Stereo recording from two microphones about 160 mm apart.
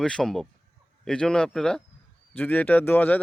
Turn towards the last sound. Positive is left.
turn(degrees=10)  # may be behind; listen again after turning